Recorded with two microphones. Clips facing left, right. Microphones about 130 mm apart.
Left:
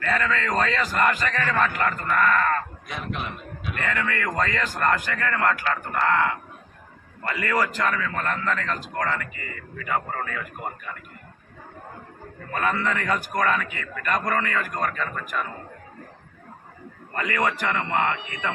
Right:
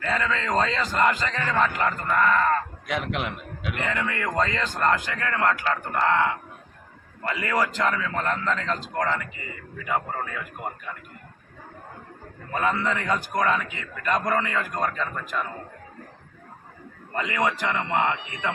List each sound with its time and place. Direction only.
0.0 s a man's voice: 20° right (ahead or behind)
2.8 s a man's voice: 85° right
3.8 s a man's voice: 15° right (ahead or behind)
12.5 s a man's voice: 15° right (ahead or behind)
17.2 s a man's voice: 15° right (ahead or behind)